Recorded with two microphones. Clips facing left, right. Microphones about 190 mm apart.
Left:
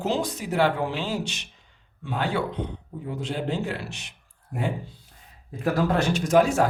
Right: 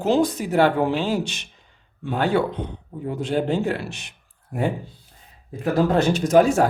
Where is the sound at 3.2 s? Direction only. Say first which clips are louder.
Right 7 dB; 55° right (ahead or behind).